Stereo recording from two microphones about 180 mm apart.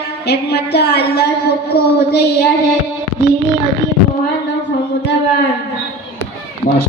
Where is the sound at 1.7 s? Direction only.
65° left (ahead or behind).